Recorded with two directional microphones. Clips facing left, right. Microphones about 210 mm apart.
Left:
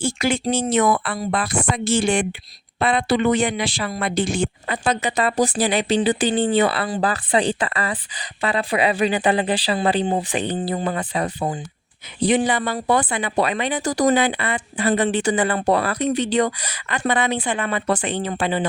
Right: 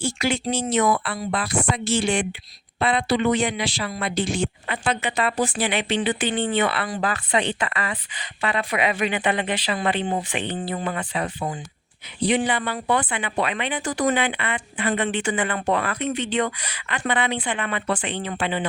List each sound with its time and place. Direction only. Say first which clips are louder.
0.0 s speech: left 3 dB; 50° left (ahead or behind)